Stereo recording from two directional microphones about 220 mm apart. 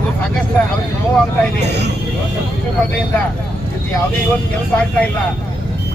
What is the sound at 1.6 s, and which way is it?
Speech, 50° right (ahead or behind).